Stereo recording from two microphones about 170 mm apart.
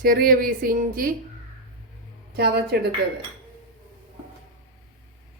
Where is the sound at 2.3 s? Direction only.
70° right (ahead or behind).